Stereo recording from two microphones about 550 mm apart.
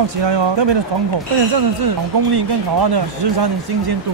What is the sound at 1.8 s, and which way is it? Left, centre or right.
Speech, right.